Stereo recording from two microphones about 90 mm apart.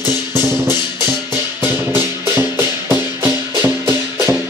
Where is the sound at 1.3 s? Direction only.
25° right (ahead or behind).